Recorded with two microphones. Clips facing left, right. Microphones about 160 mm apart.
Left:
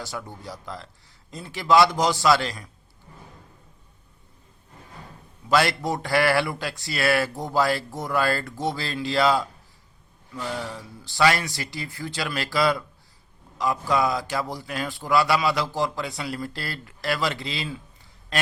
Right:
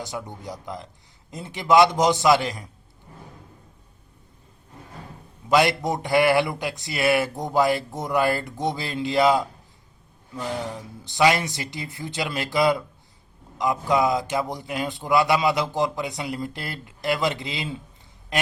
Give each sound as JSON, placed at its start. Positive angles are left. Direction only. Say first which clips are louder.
{"t": 0.0, "sound": "a man's voice", "louder": "right 2 dB", "side_deg": -20}
{"t": 5.5, "sound": "a man's voice", "louder": "right 2 dB", "side_deg": -20}